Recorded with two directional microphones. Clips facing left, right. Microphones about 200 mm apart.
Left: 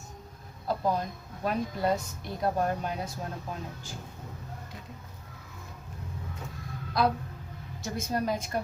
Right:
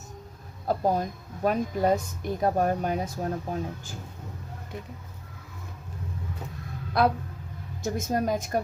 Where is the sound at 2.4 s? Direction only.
50° right (ahead or behind).